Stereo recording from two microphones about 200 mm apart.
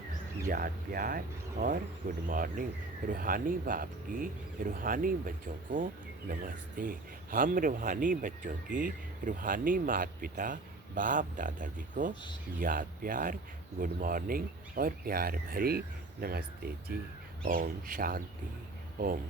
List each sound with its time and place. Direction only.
0.4 s speech: 45° right (ahead or behind)